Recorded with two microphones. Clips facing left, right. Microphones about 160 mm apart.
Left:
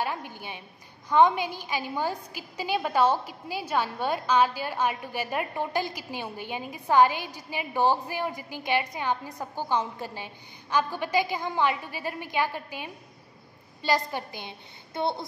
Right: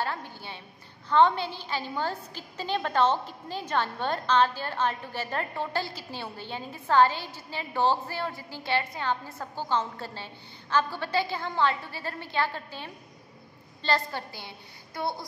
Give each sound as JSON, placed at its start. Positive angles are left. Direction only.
{"t": 0.0, "sound": "a woman's voice", "side_deg": 15}